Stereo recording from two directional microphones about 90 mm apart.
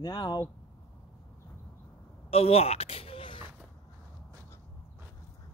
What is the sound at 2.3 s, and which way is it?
Speech, 90° left.